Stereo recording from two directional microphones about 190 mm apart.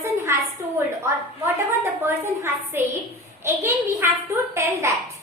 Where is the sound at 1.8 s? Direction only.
10° right (ahead or behind).